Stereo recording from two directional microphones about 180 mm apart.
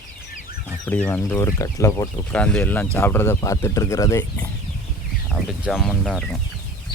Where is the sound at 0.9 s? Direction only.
10° left (ahead or behind).